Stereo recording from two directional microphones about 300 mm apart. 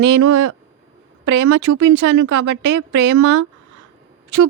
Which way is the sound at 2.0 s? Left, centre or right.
Right.